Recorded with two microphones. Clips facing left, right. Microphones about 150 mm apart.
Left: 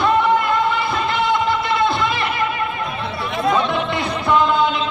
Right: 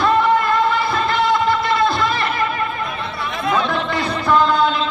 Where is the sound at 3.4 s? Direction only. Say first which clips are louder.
Left 1 dB; 20° left (ahead or behind).